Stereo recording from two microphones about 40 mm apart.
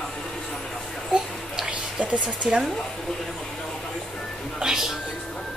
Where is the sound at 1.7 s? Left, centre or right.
Right.